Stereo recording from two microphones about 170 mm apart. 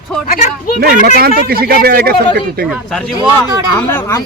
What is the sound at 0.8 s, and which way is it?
Speech, 60° right (ahead or behind).